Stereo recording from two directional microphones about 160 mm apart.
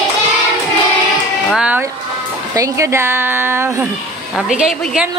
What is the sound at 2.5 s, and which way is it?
Speech, 20° right (ahead or behind).